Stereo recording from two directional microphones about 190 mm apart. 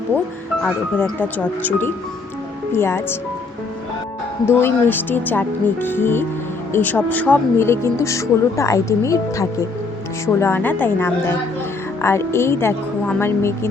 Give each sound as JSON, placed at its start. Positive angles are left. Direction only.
{"t": 0.6, "sound": "speech", "side_deg": 5}
{"t": 4.4, "sound": "speech", "side_deg": 10}